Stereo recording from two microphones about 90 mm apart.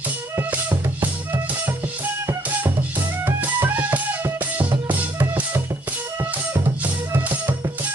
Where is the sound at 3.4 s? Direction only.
20° right (ahead or behind).